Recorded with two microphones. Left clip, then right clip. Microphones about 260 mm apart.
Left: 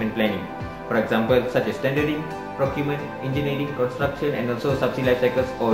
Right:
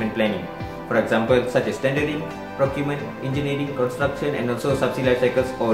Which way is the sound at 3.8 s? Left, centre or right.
Right.